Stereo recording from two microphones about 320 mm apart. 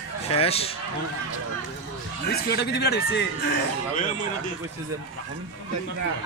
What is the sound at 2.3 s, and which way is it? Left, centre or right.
Speech, left.